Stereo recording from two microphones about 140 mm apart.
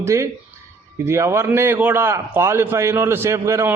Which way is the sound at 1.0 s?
20° right (ahead or behind).